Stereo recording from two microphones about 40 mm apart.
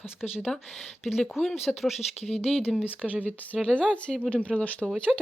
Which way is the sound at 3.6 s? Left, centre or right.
Left.